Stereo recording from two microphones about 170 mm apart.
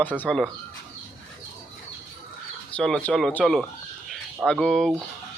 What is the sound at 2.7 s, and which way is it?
Speech, 5° left (ahead or behind).